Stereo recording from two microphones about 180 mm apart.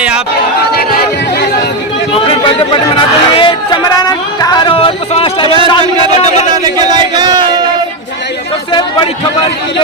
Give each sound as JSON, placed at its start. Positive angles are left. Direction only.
{"t": 0.6, "sound": "chatter", "side_deg": 60}
{"t": 2.1, "sound": "speech", "side_deg": 30}
{"t": 6.7, "sound": "a sound", "side_deg": -25}